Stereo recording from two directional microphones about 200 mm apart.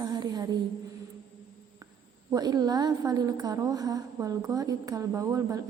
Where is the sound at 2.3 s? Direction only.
20° right (ahead or behind).